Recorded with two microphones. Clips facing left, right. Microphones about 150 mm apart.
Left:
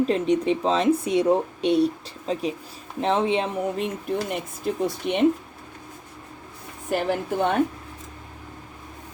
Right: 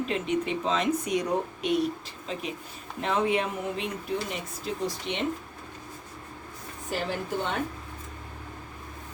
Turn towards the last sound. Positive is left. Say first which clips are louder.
# left 7 dB
turn(degrees=55)  # may be behind; listen again after turning